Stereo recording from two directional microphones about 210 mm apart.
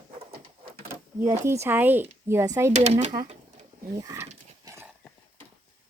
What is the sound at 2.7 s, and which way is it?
Speech, 30° right (ahead or behind).